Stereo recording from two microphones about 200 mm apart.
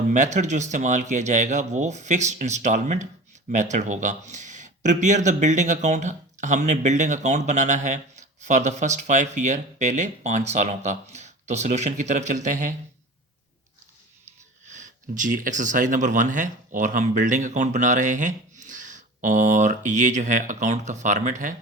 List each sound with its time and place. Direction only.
0.1 s speech: 40° right (ahead or behind)
14.7 s speech: 40° right (ahead or behind)